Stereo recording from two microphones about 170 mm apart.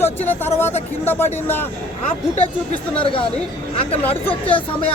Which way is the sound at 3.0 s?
30° left (ahead or behind).